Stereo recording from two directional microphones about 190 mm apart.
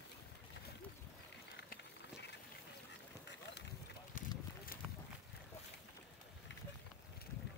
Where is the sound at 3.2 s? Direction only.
65° left (ahead or behind).